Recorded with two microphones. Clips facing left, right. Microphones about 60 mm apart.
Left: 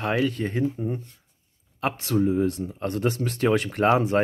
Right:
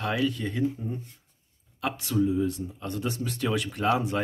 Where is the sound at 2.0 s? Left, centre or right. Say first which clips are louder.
Left 3 dB; left.